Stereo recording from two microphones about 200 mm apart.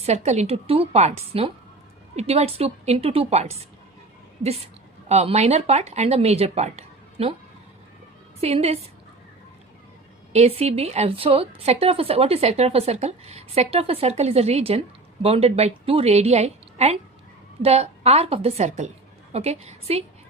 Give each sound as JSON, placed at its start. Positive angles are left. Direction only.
{"t": 0.0, "sound": "a woman's voice", "side_deg": -35}
{"t": 8.4, "sound": "a woman's voice", "side_deg": -30}
{"t": 10.3, "sound": "a woman's voice", "side_deg": -30}